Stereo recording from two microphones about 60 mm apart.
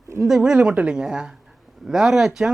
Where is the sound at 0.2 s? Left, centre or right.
Centre.